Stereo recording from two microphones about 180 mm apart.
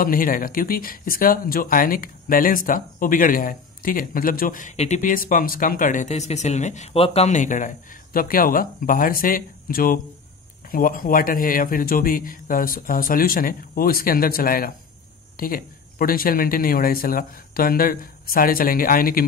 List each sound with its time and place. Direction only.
0.0 s speech: 50° left (ahead or behind)